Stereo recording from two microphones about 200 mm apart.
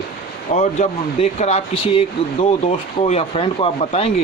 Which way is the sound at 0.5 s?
35° left (ahead or behind).